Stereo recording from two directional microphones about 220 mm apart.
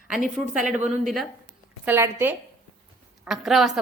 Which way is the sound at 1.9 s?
10° right (ahead or behind).